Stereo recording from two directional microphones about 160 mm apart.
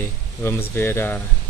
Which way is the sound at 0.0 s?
15° left (ahead or behind).